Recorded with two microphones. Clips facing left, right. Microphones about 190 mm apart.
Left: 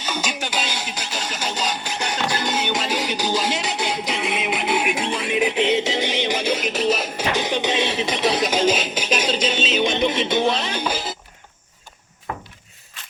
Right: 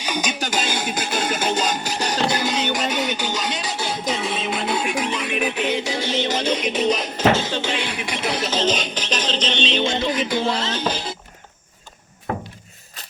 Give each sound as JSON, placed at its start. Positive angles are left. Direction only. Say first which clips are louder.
{"t": 0.0, "sound": "music", "louder": "right 2 dB", "side_deg": -15}
{"t": 0.3, "sound": "speech", "louder": "right 3 dB", "side_deg": -45}
{"t": 2.7, "sound": "music", "louder": "right 1 dB", "side_deg": 30}
{"t": 7.3, "sound": "music", "louder": "left 2 dB", "side_deg": 15}
{"t": 9.8, "sound": "music", "louder": "left 1 dB", "side_deg": 20}
{"t": 13.0, "sound": "a sound", "louder": "right 2 dB", "side_deg": -40}